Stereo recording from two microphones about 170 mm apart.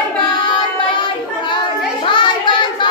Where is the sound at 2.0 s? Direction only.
30° left (ahead or behind).